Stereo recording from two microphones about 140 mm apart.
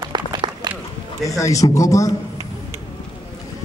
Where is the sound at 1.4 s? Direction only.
25° left (ahead or behind).